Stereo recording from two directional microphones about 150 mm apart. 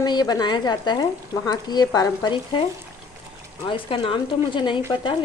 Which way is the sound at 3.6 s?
35° left (ahead or behind).